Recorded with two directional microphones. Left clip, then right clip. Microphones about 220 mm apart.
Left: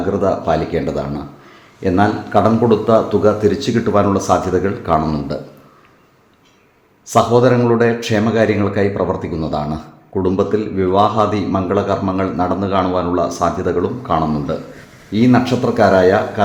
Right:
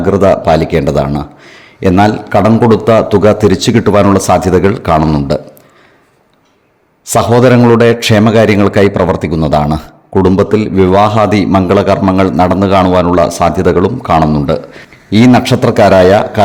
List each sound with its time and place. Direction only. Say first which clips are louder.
0.1 s a man's voice: right 9 dB; 40° right (ahead or behind)
7.0 s a man's voice: right 4 dB; 45° right (ahead or behind)